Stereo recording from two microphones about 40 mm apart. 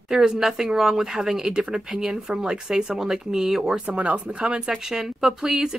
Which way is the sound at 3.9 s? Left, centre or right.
Right.